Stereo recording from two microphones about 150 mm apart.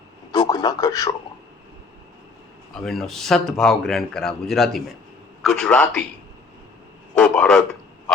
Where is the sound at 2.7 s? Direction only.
Centre (ahead or behind).